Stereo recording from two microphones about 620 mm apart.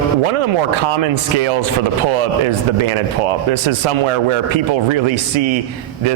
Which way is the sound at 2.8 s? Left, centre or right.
Right.